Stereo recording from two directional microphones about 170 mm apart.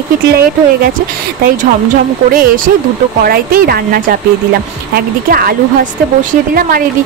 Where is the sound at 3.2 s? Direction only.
60° right (ahead or behind).